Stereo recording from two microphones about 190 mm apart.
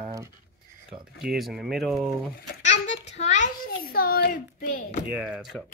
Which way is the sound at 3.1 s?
40° left (ahead or behind).